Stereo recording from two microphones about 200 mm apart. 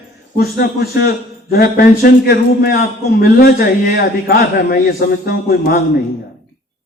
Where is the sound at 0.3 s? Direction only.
50° left (ahead or behind).